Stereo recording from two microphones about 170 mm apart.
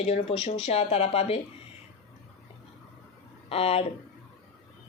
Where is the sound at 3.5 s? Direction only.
35° left (ahead or behind).